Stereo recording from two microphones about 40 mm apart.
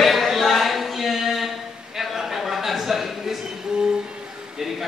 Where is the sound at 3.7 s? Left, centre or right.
Right.